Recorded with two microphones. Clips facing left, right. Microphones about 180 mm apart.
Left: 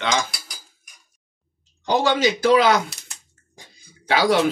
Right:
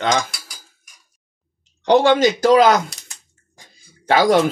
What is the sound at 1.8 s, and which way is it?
Speech, 60° right (ahead or behind).